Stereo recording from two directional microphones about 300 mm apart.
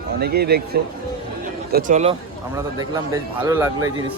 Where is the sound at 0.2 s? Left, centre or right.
Right.